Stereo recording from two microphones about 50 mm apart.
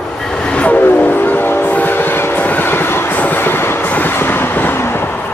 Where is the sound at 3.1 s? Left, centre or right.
Left.